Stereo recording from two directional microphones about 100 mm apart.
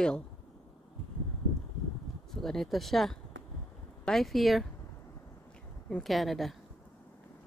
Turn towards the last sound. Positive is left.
turn(degrees=0)  # may be behind; listen again after turning